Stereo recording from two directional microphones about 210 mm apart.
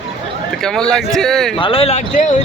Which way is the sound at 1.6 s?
25° left (ahead or behind).